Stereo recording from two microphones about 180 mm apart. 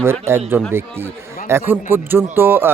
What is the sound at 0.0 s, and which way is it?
A man's voice, 15° right (ahead or behind).